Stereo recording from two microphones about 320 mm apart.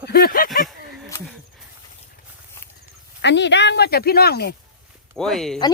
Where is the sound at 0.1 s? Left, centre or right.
Left.